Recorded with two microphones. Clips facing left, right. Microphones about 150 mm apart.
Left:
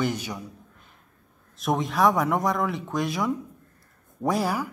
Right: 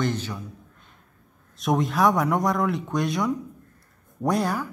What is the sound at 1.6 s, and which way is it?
Speech, centre (ahead or behind).